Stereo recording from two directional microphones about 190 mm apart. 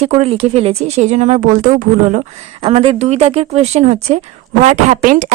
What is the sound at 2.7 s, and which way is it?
A woman's voice, 35° right (ahead or behind).